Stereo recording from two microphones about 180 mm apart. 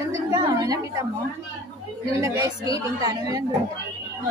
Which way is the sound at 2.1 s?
20° right (ahead or behind).